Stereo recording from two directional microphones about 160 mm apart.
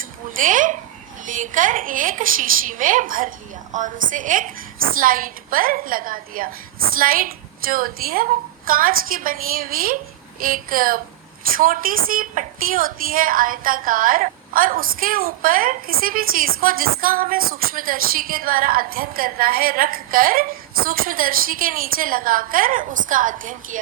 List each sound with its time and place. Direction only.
0.3 s a woman's voice: 55° right (ahead or behind)